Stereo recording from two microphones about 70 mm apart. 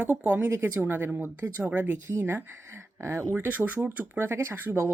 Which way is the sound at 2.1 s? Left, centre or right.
Right.